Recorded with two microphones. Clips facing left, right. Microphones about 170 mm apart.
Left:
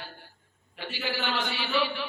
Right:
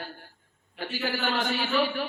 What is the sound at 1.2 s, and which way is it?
Speech, 45° right (ahead or behind).